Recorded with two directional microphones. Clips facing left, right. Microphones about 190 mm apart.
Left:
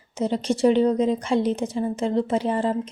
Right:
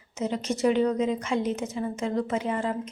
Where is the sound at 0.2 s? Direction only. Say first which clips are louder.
Left 5 dB; 30° left (ahead or behind).